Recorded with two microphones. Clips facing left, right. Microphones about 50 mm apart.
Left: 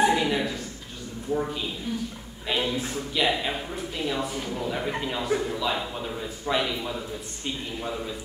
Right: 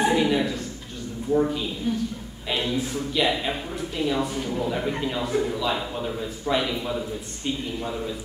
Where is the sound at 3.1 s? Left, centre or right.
Centre.